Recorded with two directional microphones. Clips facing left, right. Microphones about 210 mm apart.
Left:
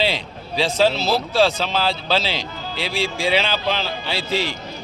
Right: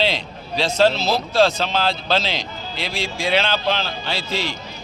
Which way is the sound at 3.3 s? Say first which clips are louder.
Right 4 dB; 5° left (ahead or behind).